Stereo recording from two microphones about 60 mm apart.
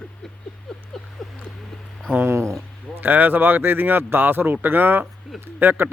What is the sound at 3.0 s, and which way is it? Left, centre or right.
Speech, right.